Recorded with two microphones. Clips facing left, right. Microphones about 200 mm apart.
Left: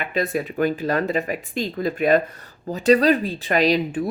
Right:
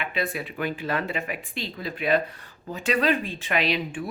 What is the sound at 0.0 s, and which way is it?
Speech, 40° left (ahead or behind).